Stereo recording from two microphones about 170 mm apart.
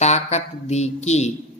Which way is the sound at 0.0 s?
40° left (ahead or behind).